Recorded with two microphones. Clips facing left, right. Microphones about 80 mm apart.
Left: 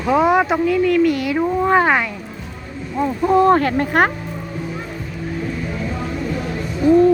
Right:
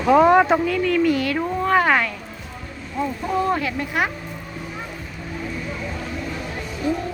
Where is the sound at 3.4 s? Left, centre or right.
Left.